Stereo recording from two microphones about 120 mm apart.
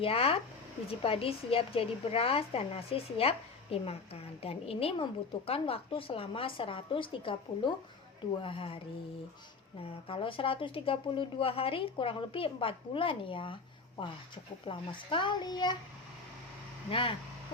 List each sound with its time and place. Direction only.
0.0 s a woman's voice: 55° left (ahead or behind)
9.8 s a woman's voice: 50° left (ahead or behind)
14.7 s a child's voice: 45° left (ahead or behind)
16.9 s a woman's voice: 50° left (ahead or behind)